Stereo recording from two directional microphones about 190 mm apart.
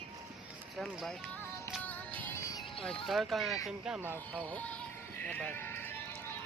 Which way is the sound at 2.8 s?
Centre (ahead or behind).